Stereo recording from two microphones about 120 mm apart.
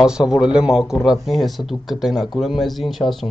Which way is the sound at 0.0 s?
5° right (ahead or behind).